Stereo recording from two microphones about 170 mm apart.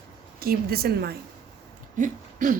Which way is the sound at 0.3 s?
65° right (ahead or behind).